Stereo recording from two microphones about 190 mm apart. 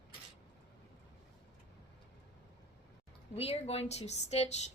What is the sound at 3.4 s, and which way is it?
A woman's voice, 30° left (ahead or behind).